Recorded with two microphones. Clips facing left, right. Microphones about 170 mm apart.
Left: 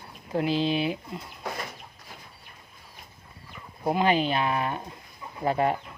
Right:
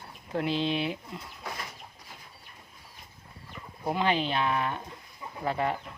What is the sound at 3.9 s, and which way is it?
Speech, 10° left (ahead or behind).